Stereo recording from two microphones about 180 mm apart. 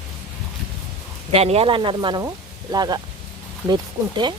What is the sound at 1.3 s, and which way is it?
Speech, 35° right (ahead or behind).